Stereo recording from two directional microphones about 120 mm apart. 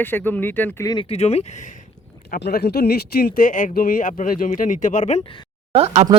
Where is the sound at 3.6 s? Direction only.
90° left.